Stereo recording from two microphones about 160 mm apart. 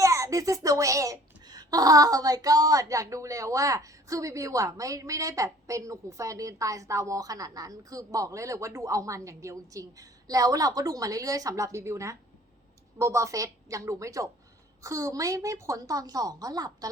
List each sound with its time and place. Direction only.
0.0 s a woman's voice: 20° right (ahead or behind)